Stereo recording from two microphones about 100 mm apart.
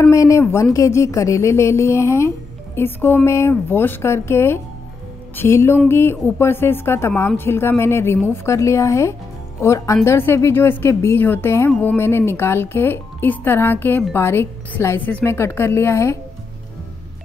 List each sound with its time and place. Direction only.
0.1 s speech: 30° left (ahead or behind)